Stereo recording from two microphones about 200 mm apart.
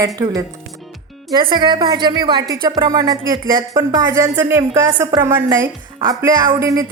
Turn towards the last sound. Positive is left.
turn(degrees=-15)  # may be behind; listen again after turning